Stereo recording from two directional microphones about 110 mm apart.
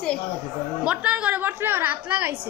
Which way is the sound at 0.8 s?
10° right (ahead or behind).